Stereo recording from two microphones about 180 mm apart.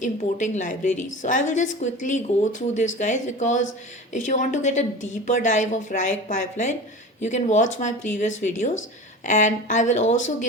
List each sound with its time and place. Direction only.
0.0 s a woman's voice: 40° left (ahead or behind)